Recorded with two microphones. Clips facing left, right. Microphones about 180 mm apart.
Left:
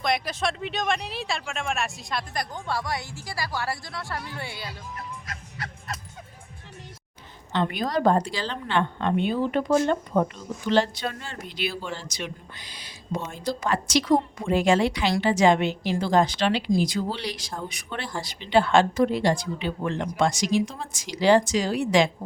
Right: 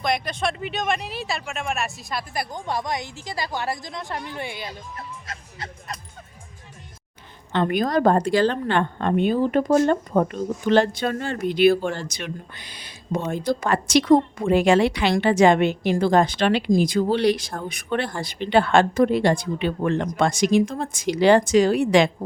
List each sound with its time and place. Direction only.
0.0 s speech: centre (ahead or behind); by 5.7 s 25° right (ahead or behind)
7.5 s a woman's voice: 50° right (ahead or behind)